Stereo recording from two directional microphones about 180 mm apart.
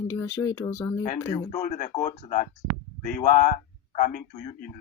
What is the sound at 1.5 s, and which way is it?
Speech, 45° left (ahead or behind).